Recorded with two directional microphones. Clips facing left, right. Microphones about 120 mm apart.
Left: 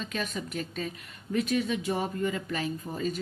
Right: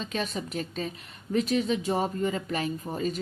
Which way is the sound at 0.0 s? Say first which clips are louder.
Right 2 dB; 30° right (ahead or behind).